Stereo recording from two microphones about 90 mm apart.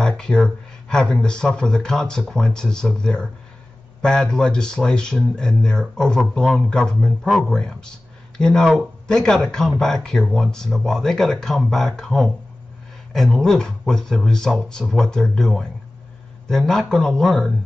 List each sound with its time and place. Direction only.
0.0 s speech: 5° left (ahead or behind)